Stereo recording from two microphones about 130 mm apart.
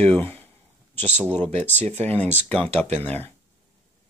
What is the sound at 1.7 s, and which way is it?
Speech, 15° left (ahead or behind).